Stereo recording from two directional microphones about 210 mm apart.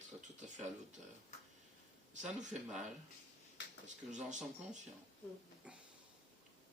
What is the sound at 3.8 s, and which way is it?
Speech, 35° right (ahead or behind).